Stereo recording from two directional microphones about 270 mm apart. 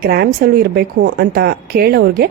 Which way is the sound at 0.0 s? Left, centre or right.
Right.